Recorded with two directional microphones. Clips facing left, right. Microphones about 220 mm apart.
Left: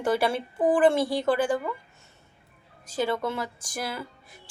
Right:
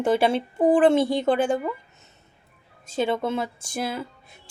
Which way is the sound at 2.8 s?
25° right (ahead or behind).